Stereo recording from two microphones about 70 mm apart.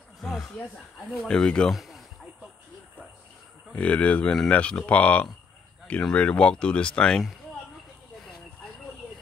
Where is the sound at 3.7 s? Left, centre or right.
Centre.